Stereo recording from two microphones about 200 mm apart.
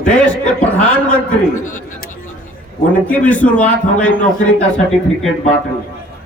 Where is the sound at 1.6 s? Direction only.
40° left (ahead or behind).